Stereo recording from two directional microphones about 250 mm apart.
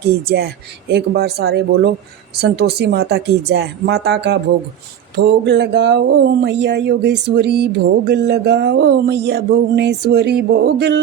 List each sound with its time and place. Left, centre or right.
0.3 s speech: right